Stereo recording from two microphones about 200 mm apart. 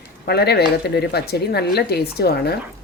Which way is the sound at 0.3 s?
55° left (ahead or behind).